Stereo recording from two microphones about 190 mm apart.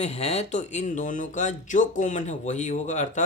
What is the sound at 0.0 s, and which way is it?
Speech, 35° left (ahead or behind).